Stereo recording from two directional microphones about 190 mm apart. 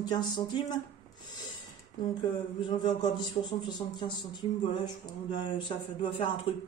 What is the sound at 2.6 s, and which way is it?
Speech, 25° left (ahead or behind).